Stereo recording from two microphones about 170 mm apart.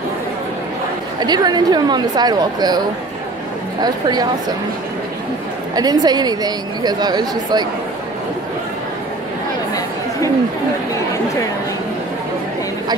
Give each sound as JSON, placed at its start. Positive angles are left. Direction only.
{"t": 1.2, "sound": "a woman's voice", "side_deg": -25}
{"t": 3.8, "sound": "a woman's voice", "side_deg": -25}
{"t": 5.8, "sound": "a woman's voice", "side_deg": -25}